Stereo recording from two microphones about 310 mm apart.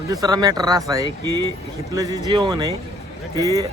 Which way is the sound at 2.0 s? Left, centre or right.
Centre.